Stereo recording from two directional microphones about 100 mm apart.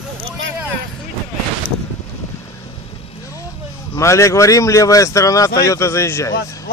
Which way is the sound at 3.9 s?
30° left (ahead or behind).